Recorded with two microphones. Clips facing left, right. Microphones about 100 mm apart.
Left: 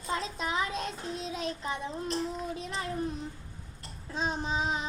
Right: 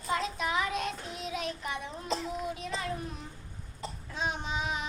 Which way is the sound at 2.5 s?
30° left (ahead or behind).